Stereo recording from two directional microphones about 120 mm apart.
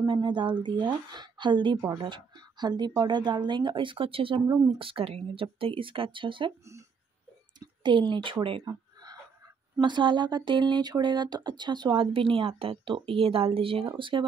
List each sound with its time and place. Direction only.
0.0 s speech: 40° right (ahead or behind)
7.8 s speech: 40° right (ahead or behind)
9.8 s speech: 40° right (ahead or behind)